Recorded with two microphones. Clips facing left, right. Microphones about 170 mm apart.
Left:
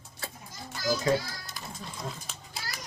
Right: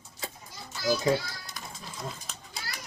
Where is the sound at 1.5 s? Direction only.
Centre (ahead or behind).